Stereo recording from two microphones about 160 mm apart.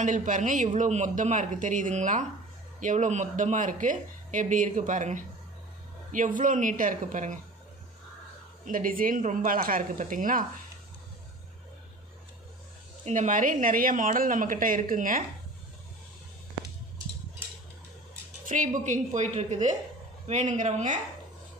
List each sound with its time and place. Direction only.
0.0 s speech: 50° right (ahead or behind)
8.6 s speech: 60° right (ahead or behind)
13.0 s speech: 50° right (ahead or behind)
18.5 s speech: 55° right (ahead or behind)